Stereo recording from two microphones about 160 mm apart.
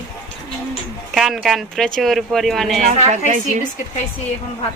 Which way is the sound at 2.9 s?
45° right (ahead or behind).